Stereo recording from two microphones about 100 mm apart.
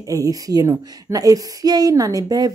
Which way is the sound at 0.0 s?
35° right (ahead or behind).